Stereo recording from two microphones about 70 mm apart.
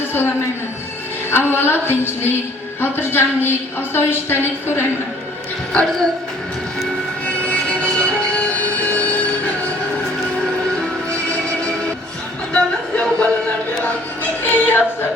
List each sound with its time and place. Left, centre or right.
1.3 s a woman's voice: left
5.7 s speech: centre
7.3 s music: centre
12.5 s a sound: centre
14.4 s music: left